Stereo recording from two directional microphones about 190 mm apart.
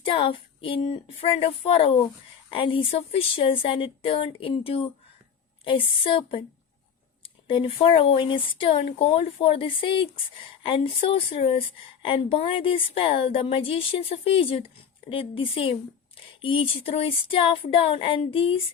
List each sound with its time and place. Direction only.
0.0 s speech: 25° left (ahead or behind)